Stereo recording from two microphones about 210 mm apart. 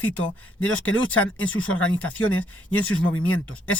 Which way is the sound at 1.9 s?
5° left (ahead or behind).